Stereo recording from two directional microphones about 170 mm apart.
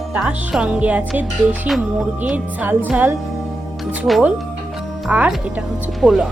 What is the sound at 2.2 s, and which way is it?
Speech, 10° right (ahead or behind).